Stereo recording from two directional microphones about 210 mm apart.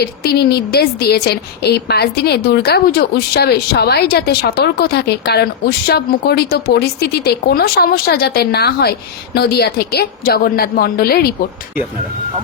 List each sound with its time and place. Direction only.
0.0 s a woman's voice: 50° left (ahead or behind)